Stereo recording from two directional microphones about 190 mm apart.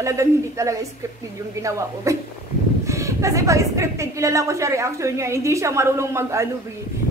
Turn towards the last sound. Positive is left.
turn(degrees=-15)  # may be behind; listen again after turning